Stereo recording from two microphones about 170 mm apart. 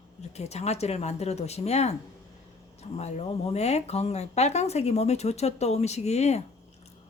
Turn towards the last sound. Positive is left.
turn(degrees=40)  # may be behind; listen again after turning